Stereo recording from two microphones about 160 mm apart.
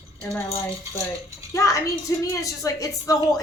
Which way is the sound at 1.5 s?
20° left (ahead or behind).